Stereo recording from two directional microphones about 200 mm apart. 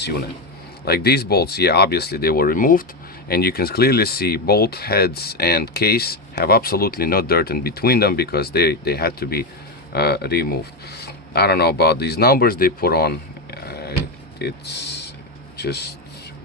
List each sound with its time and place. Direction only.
0.9 s speech: 50° left (ahead or behind)